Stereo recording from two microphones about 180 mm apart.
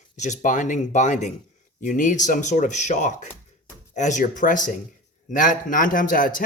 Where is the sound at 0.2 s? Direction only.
40° left (ahead or behind).